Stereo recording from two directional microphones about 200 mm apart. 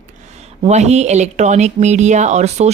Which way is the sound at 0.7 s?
35° right (ahead or behind).